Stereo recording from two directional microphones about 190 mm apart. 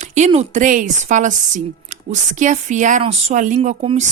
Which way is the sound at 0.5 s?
45° right (ahead or behind).